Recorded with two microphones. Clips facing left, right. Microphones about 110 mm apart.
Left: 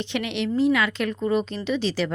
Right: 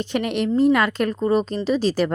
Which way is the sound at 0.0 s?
45° right (ahead or behind).